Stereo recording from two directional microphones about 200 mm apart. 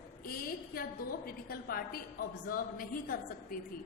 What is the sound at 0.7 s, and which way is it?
A woman's voice, 50° left (ahead or behind).